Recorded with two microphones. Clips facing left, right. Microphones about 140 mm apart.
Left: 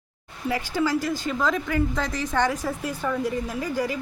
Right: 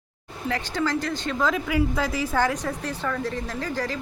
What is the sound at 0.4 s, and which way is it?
A woman's voice, 10° left (ahead or behind).